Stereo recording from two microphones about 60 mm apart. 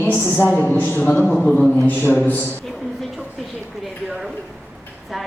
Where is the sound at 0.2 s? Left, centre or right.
Left.